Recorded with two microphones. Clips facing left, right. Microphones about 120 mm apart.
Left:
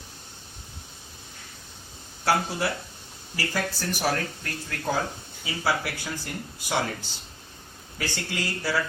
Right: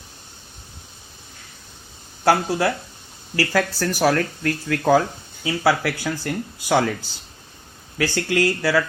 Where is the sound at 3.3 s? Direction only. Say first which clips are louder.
Right 8 dB; 90° right.